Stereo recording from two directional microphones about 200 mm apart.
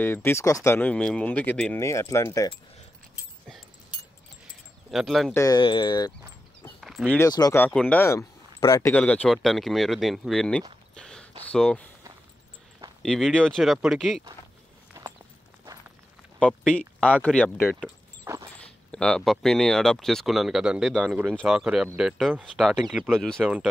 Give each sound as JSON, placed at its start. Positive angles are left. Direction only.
{"t": 0.0, "sound": "speech", "side_deg": 10}
{"t": 4.9, "sound": "speech", "side_deg": 0}
{"t": 5.3, "sound": "speech", "side_deg": 15}
{"t": 6.8, "sound": "a sound", "side_deg": 0}
{"t": 7.2, "sound": "speech", "side_deg": 20}
{"t": 11.0, "sound": "a sound", "side_deg": 5}
{"t": 13.0, "sound": "speech", "side_deg": 5}
{"t": 15.0, "sound": "walk", "side_deg": -15}
{"t": 16.3, "sound": "speech", "side_deg": 5}
{"t": 18.2, "sound": "a sound", "side_deg": -15}
{"t": 18.6, "sound": "speech", "side_deg": 5}